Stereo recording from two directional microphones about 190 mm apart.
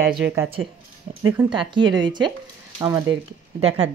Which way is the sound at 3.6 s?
30° right (ahead or behind).